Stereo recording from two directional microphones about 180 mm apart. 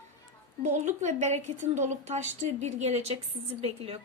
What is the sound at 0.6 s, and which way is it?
Speech, 40° right (ahead or behind).